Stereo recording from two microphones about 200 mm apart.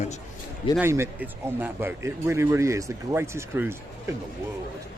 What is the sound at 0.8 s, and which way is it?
Speech, 10° right (ahead or behind).